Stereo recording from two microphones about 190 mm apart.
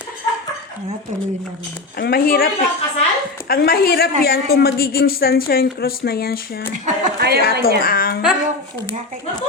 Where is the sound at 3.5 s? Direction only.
55° left (ahead or behind).